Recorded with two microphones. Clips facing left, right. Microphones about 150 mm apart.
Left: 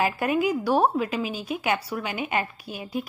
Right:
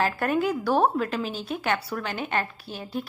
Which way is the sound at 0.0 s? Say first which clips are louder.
Left 1 dB; 10° left (ahead or behind).